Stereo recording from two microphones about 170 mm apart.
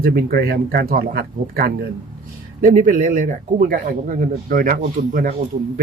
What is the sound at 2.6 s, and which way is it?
Speech, 50° right (ahead or behind).